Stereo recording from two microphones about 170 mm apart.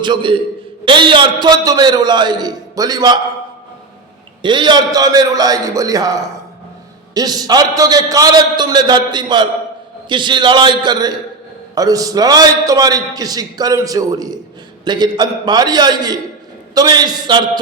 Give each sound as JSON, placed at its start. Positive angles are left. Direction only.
{"t": 0.0, "sound": "a man's voice", "side_deg": -30}
{"t": 4.4, "sound": "a man's voice", "side_deg": -25}